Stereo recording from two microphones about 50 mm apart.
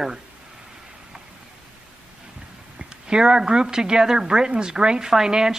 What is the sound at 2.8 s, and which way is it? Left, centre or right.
A woman's voice, centre.